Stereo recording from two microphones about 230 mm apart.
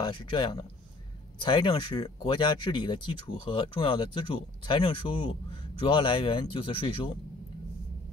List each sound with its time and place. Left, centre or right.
0.0 s speech: centre